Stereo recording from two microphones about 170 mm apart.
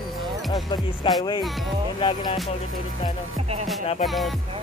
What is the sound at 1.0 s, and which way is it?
Music, 30° left (ahead or behind).